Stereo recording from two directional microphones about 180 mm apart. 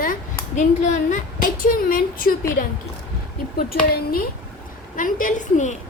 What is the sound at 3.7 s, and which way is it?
Speech, 55° left (ahead or behind).